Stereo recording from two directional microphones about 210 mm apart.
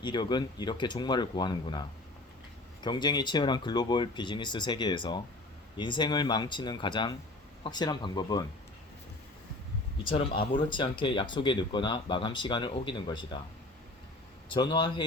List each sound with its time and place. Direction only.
0.0 s speech: 20° left (ahead or behind)
2.8 s speech: 20° left (ahead or behind)
10.0 s speech: 25° left (ahead or behind)
14.5 s speech: 25° left (ahead or behind)